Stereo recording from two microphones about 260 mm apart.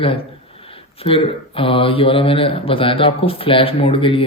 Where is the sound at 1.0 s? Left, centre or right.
Left.